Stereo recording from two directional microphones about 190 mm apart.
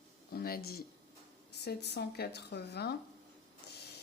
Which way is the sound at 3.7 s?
55° left (ahead or behind).